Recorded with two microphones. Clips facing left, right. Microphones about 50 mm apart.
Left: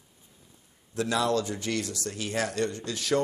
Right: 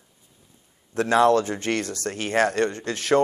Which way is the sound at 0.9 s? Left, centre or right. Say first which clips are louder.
Right 8 dB; right.